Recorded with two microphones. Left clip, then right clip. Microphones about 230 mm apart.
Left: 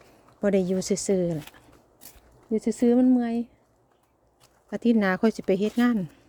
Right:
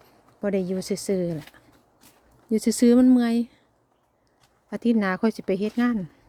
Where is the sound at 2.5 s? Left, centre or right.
Centre.